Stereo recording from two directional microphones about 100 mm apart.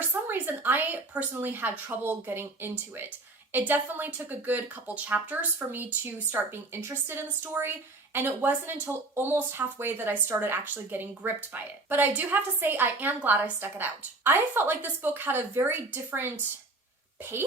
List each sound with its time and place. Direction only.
0.0 s speech: 20° right (ahead or behind)